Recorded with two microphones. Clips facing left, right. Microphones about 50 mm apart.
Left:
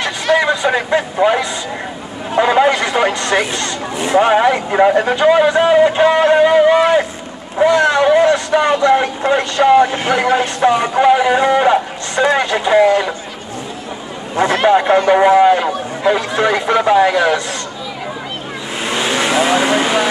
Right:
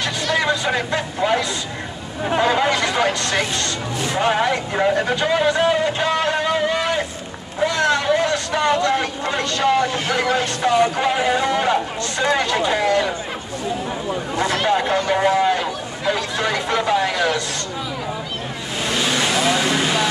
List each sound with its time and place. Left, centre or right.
0.0 s vehicle: left
2.4 s speech: left
14.3 s speech: left
18.8 s vehicle: left